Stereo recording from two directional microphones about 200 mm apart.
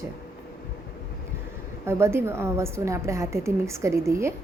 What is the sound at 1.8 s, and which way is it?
A woman's voice, 15° right (ahead or behind).